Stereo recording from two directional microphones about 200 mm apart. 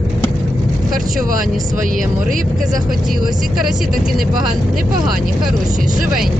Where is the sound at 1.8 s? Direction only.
40° right (ahead or behind).